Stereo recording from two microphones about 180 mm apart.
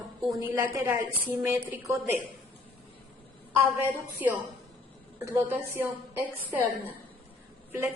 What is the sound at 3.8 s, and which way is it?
A woman's voice, 10° right (ahead or behind).